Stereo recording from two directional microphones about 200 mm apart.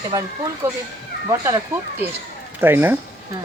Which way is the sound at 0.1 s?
15° right (ahead or behind).